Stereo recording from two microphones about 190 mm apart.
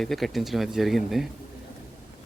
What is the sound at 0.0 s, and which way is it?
A man's voice, centre (ahead or behind).